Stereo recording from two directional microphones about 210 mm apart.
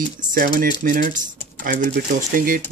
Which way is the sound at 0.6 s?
45° right (ahead or behind).